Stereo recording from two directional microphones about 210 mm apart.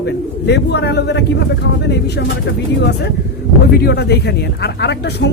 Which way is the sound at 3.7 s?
50° left (ahead or behind).